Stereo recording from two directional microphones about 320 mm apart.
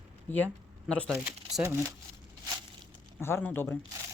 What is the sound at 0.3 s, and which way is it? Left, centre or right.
Speech, centre.